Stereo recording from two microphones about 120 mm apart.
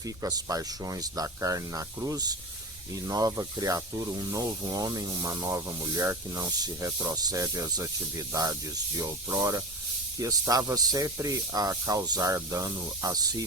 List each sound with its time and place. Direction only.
0.2 s speech: 30° right (ahead or behind)